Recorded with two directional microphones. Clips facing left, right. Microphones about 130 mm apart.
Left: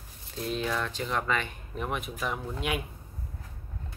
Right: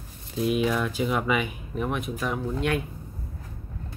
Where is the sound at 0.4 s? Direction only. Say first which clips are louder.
Right 7 dB; 10° right (ahead or behind).